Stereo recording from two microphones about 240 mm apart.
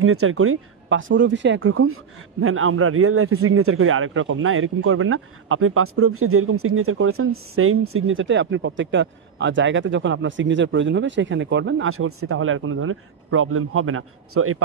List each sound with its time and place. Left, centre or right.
0.0 s a man's voice: right